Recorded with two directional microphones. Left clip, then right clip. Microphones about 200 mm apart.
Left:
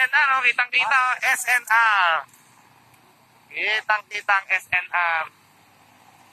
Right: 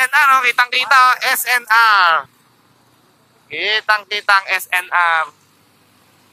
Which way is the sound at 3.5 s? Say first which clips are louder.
Right 6 dB; 35° right (ahead or behind).